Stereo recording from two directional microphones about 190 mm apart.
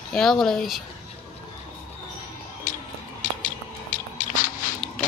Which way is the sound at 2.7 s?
45° left (ahead or behind).